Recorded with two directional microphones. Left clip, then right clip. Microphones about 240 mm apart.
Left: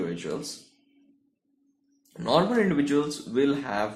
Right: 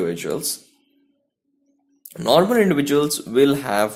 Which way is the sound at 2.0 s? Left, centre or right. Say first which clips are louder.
Right 7 dB; right.